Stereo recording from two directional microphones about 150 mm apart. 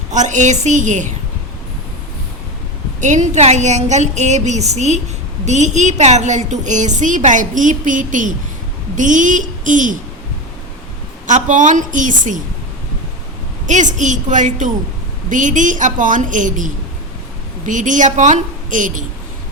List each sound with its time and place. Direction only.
0.1 s a woman's voice: 55° right (ahead or behind)
3.0 s a woman's voice: 50° right (ahead or behind)
11.3 s a woman's voice: 55° right (ahead or behind)
13.7 s a woman's voice: 55° right (ahead or behind)